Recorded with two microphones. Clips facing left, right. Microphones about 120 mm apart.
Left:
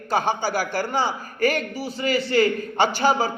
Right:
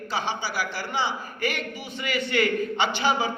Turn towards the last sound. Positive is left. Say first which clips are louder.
# left 4 dB
turn(degrees=40)  # may be behind; listen again after turning